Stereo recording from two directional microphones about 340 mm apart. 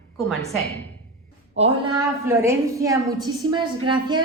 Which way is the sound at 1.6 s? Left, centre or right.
Centre.